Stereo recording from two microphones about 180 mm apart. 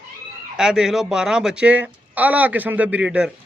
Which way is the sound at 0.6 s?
5° right (ahead or behind).